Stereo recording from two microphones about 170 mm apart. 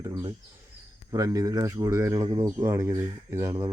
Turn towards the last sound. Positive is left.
turn(degrees=-20)  # may be behind; listen again after turning